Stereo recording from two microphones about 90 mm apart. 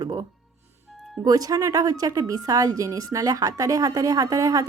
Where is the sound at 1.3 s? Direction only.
45° right (ahead or behind).